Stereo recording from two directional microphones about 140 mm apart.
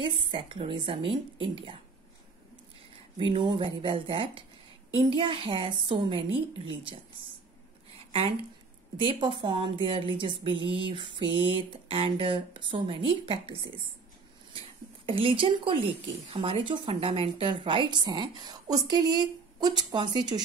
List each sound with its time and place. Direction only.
0.0 s speech: 35° right (ahead or behind)
3.2 s speech: 35° right (ahead or behind)
8.9 s speech: 35° right (ahead or behind)
15.0 s speech: 40° right (ahead or behind)